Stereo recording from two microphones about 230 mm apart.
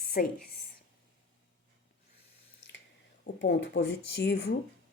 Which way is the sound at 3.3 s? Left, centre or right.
Left.